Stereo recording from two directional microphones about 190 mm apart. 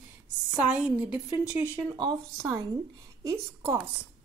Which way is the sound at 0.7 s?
5° right (ahead or behind).